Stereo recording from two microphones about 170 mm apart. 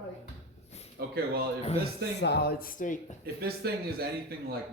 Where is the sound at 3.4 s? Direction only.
65° right (ahead or behind).